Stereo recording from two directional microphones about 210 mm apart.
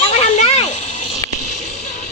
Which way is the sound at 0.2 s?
30° left (ahead or behind).